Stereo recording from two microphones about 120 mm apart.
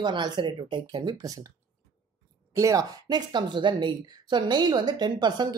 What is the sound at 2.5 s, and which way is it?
A woman's voice, 30° right (ahead or behind).